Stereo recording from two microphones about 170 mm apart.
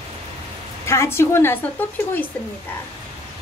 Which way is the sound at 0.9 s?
15° left (ahead or behind).